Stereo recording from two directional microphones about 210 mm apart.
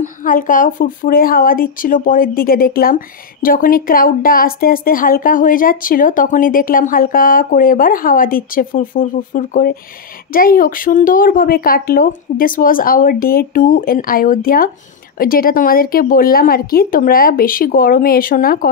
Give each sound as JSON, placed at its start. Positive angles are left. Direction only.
{"t": 0.0, "sound": "speech", "side_deg": 40}